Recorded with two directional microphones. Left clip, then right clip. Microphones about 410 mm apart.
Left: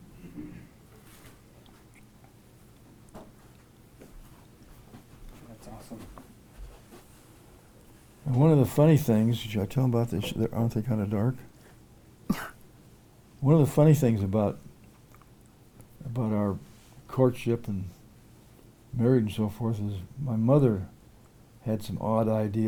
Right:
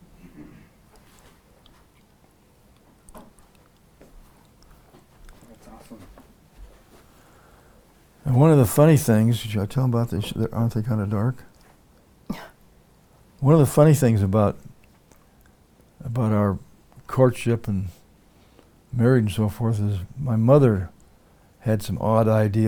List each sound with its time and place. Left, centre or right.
8.2 s speech: right
12.3 s cough: centre
13.4 s speech: right
16.1 s a sound: right
17.1 s speech: right
18.9 s speech: right